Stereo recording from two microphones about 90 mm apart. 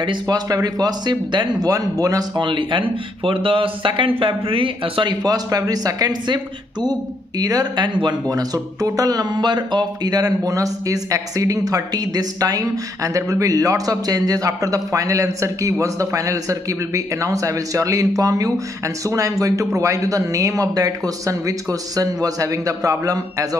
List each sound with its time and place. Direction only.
0.0 s speech: 60° right (ahead or behind)
0.5 s speech: 45° right (ahead or behind)
1.7 s speech: 40° right (ahead or behind)
2.4 s speech: 65° right (ahead or behind)
5.2 s speech: 45° right (ahead or behind)
8.3 s speech: 40° right (ahead or behind)